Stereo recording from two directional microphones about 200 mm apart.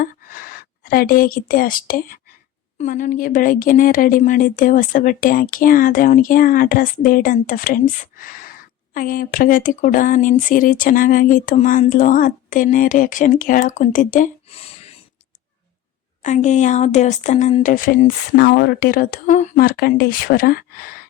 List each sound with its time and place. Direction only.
0.0 s a woman's voice: 45° left (ahead or behind)
8.2 s a sound: 45° left (ahead or behind)
8.9 s speech: 45° left (ahead or behind)
16.2 s speech: 35° left (ahead or behind)